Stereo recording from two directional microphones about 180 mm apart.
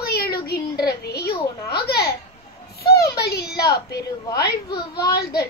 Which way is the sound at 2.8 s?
60° left (ahead or behind).